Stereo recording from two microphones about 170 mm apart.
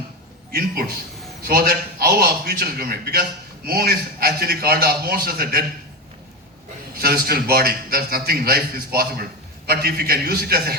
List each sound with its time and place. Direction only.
1.5 s a man's voice: 65° right (ahead or behind)
6.9 s a man's voice: 65° right (ahead or behind)